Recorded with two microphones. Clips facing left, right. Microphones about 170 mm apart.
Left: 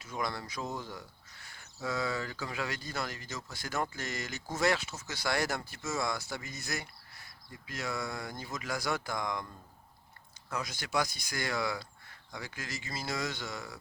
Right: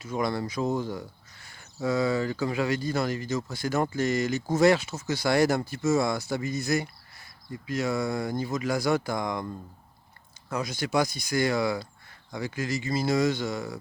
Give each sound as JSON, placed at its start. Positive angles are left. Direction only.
{"t": 0.2, "sound": "speech", "side_deg": -20}
{"t": 1.8, "sound": "speech", "side_deg": -15}
{"t": 6.4, "sound": "speech", "side_deg": -15}
{"t": 10.7, "sound": "speech", "side_deg": -10}